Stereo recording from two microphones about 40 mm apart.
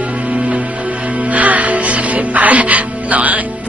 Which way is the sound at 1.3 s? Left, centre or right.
Right.